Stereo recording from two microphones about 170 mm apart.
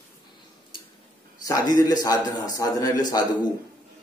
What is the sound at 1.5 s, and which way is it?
Speech, 20° left (ahead or behind).